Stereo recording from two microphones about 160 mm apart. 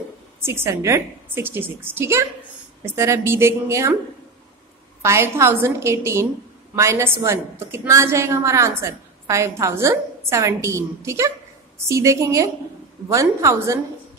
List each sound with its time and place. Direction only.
0.4 s a woman's voice: 15° right (ahead or behind)
5.0 s a woman's voice: 15° right (ahead or behind)